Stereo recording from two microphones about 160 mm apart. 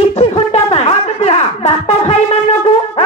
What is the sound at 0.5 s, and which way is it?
Music, 40° left (ahead or behind).